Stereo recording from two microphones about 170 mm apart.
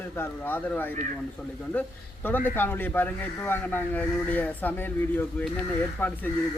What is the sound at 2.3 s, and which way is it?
Speech, 10° left (ahead or behind).